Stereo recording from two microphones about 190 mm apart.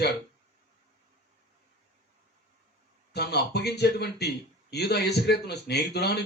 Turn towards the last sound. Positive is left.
turn(degrees=60)  # may be behind; listen again after turning